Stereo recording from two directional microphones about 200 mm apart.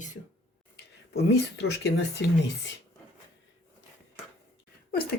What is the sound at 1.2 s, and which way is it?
Speech, 55° left (ahead or behind).